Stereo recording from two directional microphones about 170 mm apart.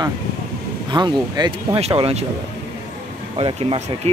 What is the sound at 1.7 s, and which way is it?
Speech, 35° right (ahead or behind).